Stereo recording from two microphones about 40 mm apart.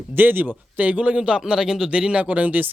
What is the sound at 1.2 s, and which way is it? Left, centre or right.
Speech, right.